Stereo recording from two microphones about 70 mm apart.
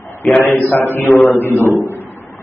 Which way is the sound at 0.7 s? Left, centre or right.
Left.